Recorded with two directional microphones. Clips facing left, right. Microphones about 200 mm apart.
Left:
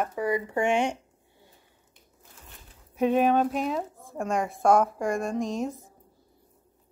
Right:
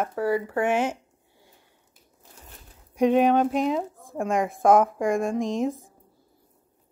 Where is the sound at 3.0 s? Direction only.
Centre (ahead or behind).